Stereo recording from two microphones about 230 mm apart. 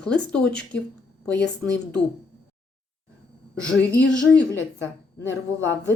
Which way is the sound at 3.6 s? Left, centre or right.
Centre.